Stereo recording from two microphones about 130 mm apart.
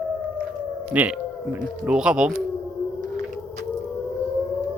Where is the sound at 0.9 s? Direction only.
15° right (ahead or behind).